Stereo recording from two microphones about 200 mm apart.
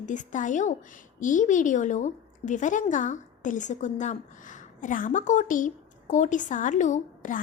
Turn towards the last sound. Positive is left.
turn(degrees=40)  # may be behind; listen again after turning